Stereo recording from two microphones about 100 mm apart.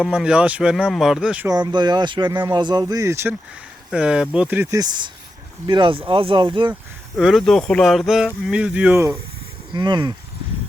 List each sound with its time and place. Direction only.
0.0 s speech: 5° right (ahead or behind)
1.5 s speech: 40° right (ahead or behind)
2.8 s speech: 30° right (ahead or behind)
3.9 s speech: 10° right (ahead or behind)
4.7 s speech: 40° right (ahead or behind)
7.2 s speech: centre (ahead or behind)
9.7 s speech: 45° right (ahead or behind)